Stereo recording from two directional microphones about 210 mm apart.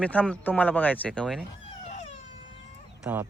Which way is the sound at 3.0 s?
10° right (ahead or behind).